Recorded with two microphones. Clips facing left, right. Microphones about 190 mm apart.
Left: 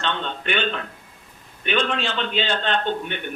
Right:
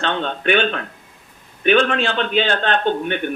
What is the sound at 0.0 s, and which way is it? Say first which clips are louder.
A man's voice: right 6 dB; 55° right (ahead or behind).